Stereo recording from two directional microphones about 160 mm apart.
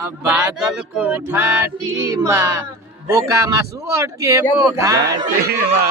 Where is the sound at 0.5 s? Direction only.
5° right (ahead or behind).